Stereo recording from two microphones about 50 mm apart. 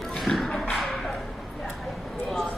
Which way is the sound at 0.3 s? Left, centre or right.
Left.